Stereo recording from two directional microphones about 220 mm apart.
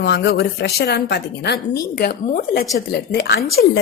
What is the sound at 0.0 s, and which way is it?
A woman's voice, 50° left (ahead or behind).